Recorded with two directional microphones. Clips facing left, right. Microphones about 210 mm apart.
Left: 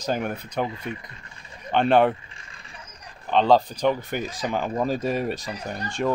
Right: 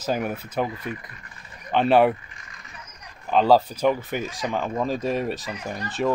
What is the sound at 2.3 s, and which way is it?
Mechanisms, 30° left (ahead or behind).